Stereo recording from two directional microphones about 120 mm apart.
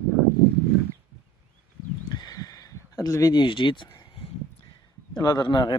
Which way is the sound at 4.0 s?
50° left (ahead or behind).